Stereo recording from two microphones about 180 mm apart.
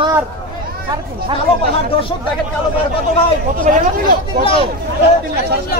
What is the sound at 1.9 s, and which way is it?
Speech, 30° left (ahead or behind).